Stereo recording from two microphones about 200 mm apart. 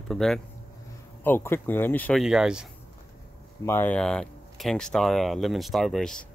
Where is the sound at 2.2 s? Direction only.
5° right (ahead or behind).